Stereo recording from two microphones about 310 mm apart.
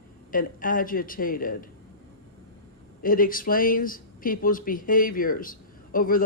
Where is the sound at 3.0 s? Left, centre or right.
Left.